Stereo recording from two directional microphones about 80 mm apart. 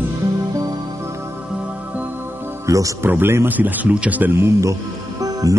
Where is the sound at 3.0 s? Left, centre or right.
Right.